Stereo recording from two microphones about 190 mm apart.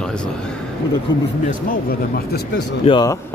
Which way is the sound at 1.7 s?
55° left (ahead or behind).